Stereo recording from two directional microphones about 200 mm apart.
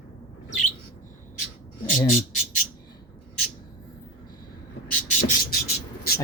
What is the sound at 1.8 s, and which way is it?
Speech, 40° left (ahead or behind).